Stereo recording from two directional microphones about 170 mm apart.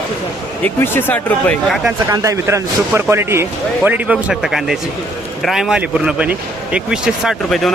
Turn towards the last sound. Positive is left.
turn(degrees=0)  # may be behind; listen again after turning